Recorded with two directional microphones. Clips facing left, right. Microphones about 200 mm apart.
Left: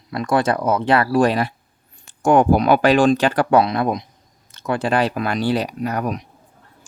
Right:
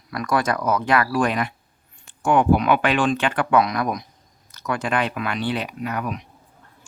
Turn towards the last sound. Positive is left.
turn(degrees=40)  # may be behind; listen again after turning